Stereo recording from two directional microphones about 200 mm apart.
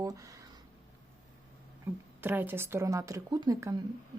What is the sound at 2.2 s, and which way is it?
Speech, 10° right (ahead or behind).